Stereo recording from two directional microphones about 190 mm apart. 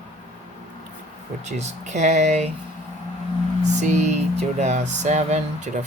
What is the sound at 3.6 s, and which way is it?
Music, 40° right (ahead or behind).